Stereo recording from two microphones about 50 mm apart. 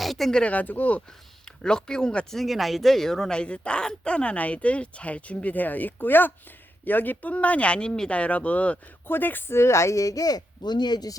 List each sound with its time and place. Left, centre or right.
0.0 s a sound: centre
0.4 s speech: left
1.6 s speech: centre
2.3 s speech: centre
3.3 s speech: left
8.1 s speech: left
9.0 s speech: left
9.6 s speech: left